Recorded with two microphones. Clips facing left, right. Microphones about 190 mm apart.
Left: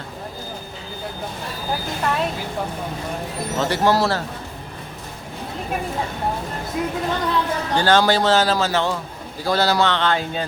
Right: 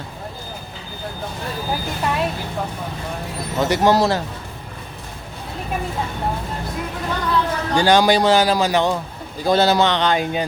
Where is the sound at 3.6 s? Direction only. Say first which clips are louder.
Right 3 dB; 15° right (ahead or behind).